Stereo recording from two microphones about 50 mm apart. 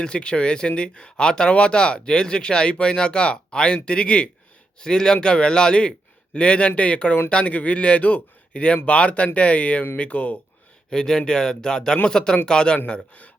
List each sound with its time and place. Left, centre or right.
0.0 s speech: centre
10.8 s speech: centre
12.9 s speech: left